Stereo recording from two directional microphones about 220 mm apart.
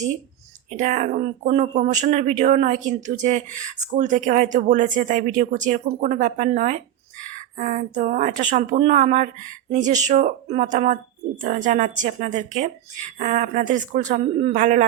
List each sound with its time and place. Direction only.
0.8 s speech: 35° right (ahead or behind)